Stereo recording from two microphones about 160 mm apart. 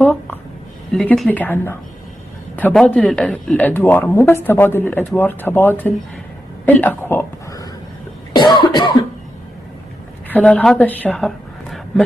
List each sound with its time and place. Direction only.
0.0 s a sound: 10° left (ahead or behind)
0.9 s speech: centre (ahead or behind)
8.4 s cough: 30° left (ahead or behind)
10.3 s a woman's voice: 10° left (ahead or behind)